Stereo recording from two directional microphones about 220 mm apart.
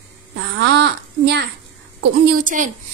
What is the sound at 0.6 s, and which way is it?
Speech, 50° right (ahead or behind).